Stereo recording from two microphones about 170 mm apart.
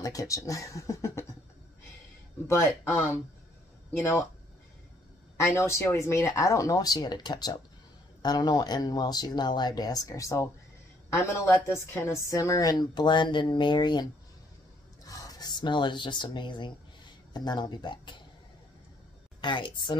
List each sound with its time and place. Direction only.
0.0 s a woman's voice: 20° left (ahead or behind)
2.4 s speech: 15° left (ahead or behind)
5.4 s a woman's voice: 15° left (ahead or behind)
15.0 s a woman's voice: 20° left (ahead or behind)
19.4 s a woman's voice: 30° left (ahead or behind)